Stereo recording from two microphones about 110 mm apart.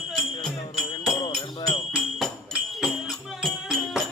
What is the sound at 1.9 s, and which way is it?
Music, centre (ahead or behind).